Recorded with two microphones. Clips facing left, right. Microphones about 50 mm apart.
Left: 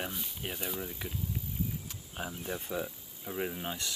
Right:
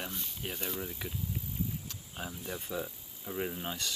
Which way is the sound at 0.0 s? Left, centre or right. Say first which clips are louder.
Left 2 dB; centre.